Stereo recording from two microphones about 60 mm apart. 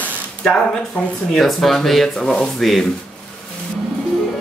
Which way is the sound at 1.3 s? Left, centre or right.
Centre.